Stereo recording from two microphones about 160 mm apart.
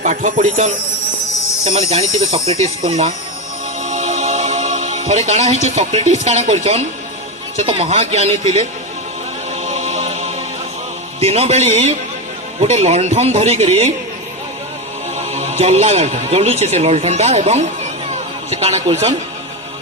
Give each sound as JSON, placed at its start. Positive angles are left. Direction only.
{"t": 0.0, "sound": "a man's voice", "side_deg": -50}
{"t": 1.7, "sound": "a man's voice", "side_deg": -45}
{"t": 3.8, "sound": "music", "side_deg": -45}
{"t": 7.6, "sound": "a man's voice", "side_deg": -40}
{"t": 9.6, "sound": "music", "side_deg": -45}
{"t": 11.2, "sound": "a man's voice", "side_deg": -40}
{"t": 15.2, "sound": "a man's voice", "side_deg": -45}